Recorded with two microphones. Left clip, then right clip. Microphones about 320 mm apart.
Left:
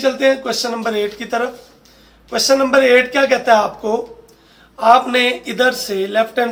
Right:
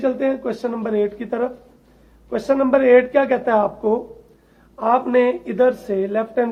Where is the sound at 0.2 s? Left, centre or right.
Right.